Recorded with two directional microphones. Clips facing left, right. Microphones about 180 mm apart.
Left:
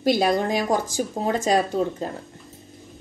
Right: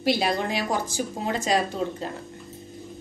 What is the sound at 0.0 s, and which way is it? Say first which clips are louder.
Speech: left 4 dB; 45° left (ahead or behind).